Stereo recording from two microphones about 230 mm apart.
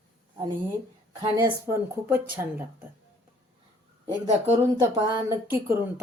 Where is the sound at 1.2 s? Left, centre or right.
Centre.